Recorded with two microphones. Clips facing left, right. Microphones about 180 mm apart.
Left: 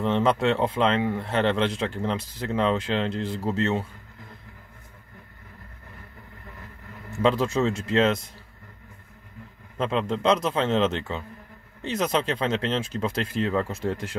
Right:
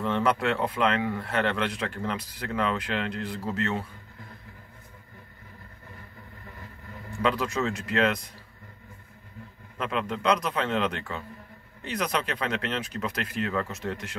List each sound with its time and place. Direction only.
0.0 s speech: 20° left (ahead or behind)
7.2 s speech: 25° left (ahead or behind)
9.8 s speech: 30° left (ahead or behind)